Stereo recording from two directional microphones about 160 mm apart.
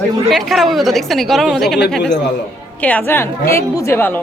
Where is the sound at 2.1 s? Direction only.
90° left.